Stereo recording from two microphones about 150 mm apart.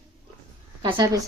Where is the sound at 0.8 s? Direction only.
30° right (ahead or behind).